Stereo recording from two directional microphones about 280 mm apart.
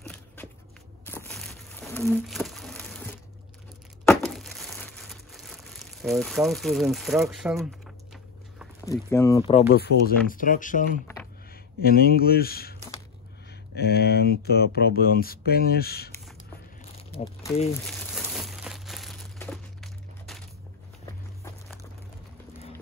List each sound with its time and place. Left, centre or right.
1.0 s a sound: centre
4.0 s crumpling: centre
8.9 s speech: centre
9.5 s speech: left
9.8 s speech: left
17.2 s speech: centre
17.8 s crumpling: centre